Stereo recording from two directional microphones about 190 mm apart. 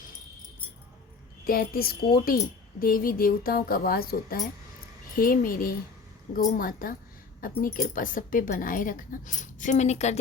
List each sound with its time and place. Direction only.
1.5 s speech: 50° left (ahead or behind)